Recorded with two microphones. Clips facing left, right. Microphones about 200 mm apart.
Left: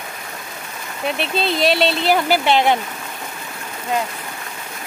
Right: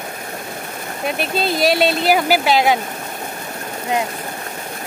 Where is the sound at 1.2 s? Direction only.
40° right (ahead or behind).